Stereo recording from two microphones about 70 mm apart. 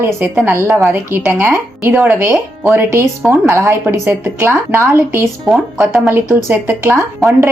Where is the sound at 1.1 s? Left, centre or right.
Right.